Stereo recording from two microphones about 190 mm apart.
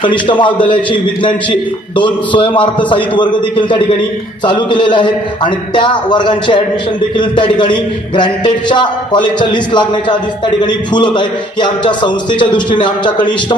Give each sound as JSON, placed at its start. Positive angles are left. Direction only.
{"t": 0.0, "sound": "a man's voice", "side_deg": 25}